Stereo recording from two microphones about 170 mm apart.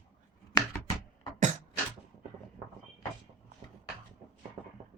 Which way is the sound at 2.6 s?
30° right (ahead or behind).